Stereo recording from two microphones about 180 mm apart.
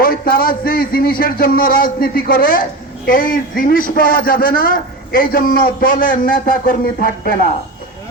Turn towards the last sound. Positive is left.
turn(degrees=50)  # may be behind; listen again after turning